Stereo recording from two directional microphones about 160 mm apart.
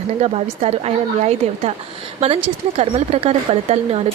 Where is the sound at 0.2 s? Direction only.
40° right (ahead or behind).